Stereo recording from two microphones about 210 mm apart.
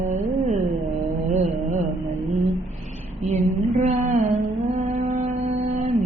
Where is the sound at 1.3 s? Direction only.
35° right (ahead or behind).